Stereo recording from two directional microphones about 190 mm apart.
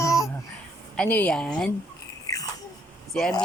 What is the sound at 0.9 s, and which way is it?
Speech, 5° left (ahead or behind).